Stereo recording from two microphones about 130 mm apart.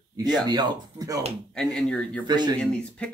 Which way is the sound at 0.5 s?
30° right (ahead or behind).